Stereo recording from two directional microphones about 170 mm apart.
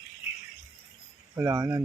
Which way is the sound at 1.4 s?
15° right (ahead or behind).